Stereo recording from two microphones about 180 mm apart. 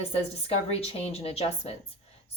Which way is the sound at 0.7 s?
35° left (ahead or behind).